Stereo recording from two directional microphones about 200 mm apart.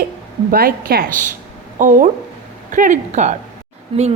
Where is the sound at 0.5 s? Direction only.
50° right (ahead or behind).